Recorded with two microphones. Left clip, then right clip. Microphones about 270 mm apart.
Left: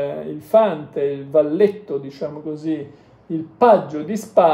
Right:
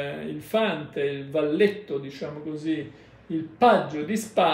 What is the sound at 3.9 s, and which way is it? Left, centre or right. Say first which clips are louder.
Speech: left 4 dB; centre.